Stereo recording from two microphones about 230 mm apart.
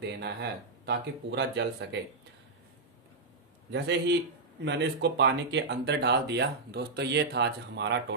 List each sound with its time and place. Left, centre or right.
0.0 s speech: right
3.7 s speech: right